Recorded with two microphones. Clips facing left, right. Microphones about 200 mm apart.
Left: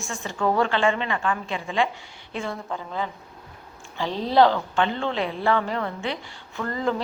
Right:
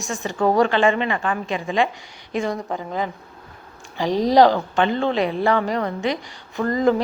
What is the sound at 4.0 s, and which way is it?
A woman's voice, 15° right (ahead or behind).